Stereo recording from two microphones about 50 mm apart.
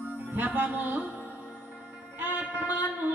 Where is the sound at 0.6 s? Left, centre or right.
Right.